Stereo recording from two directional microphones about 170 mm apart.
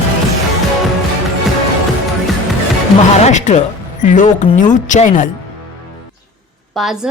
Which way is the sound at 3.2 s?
45° left (ahead or behind).